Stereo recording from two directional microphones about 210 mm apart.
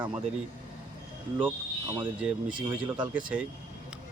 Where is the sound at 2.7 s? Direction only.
20° right (ahead or behind).